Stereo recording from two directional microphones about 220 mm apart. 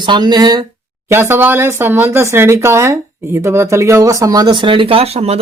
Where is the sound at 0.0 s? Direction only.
20° right (ahead or behind).